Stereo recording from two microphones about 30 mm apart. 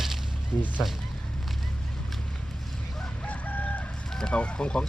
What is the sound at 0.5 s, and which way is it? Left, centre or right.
Speech, left.